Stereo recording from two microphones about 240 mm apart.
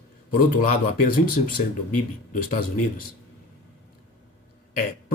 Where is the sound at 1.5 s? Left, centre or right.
Left.